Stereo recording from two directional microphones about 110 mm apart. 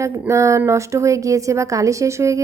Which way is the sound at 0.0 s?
25° right (ahead or behind).